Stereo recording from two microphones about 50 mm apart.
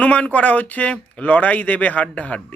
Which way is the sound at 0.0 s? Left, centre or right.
Left.